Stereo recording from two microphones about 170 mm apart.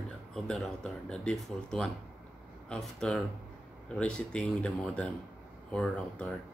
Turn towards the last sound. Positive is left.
turn(degrees=5)  # may be behind; listen again after turning